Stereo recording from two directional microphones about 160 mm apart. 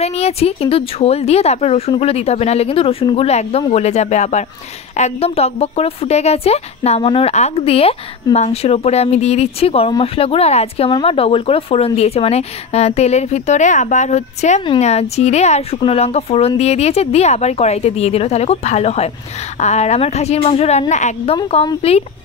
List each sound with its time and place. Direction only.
0.0 s a woman's voice: 40° left (ahead or behind)